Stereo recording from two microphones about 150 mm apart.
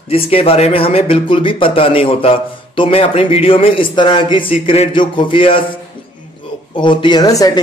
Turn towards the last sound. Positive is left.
turn(degrees=25)  # may be behind; listen again after turning